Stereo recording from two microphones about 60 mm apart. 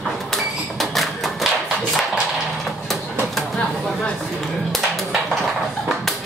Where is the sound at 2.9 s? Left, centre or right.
Centre.